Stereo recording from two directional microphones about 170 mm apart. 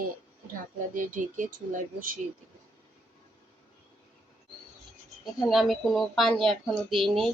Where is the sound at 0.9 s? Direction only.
50° right (ahead or behind).